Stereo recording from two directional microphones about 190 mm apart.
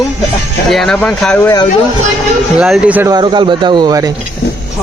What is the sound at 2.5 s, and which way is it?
Speech, 5° right (ahead or behind).